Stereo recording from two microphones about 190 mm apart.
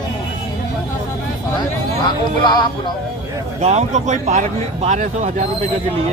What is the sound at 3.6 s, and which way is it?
Speech, 35° right (ahead or behind).